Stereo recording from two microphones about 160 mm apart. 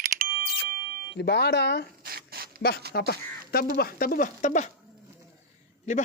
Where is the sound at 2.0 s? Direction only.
70° right (ahead or behind).